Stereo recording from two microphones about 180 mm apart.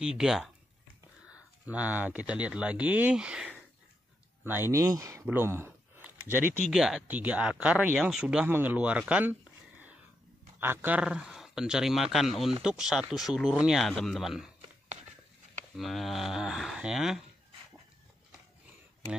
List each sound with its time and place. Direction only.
0.0 s speech: 5° right (ahead or behind)
15.7 s speech: centre (ahead or behind)